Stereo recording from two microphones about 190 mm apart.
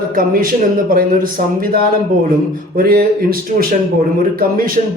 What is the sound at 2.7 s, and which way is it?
A man's voice, 50° right (ahead or behind).